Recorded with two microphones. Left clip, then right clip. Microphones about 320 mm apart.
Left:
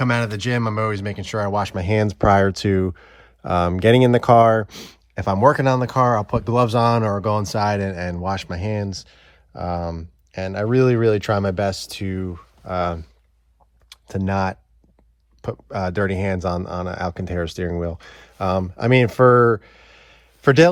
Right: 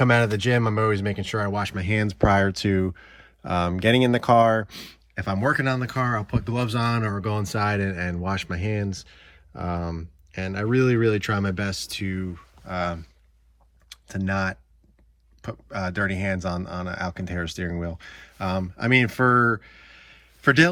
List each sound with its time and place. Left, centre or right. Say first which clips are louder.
0.0 s speech: right 2 dB; centre
12.6 s speech: left 5 dB; left